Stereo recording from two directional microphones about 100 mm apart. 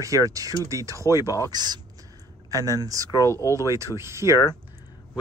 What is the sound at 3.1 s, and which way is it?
Speech, 30° left (ahead or behind).